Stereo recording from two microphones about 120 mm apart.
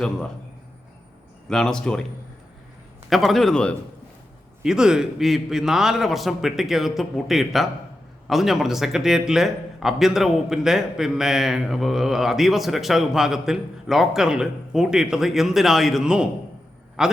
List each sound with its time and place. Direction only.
1.5 s a man's voice: 5° left (ahead or behind)
3.1 s a man's voice: centre (ahead or behind)
4.6 s a man's voice: 5° right (ahead or behind)